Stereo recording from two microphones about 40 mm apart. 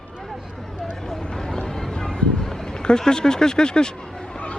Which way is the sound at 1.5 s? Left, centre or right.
Centre.